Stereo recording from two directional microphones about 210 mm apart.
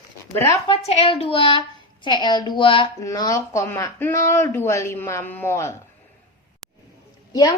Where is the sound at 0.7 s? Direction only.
30° left (ahead or behind); by 5.7 s 10° left (ahead or behind).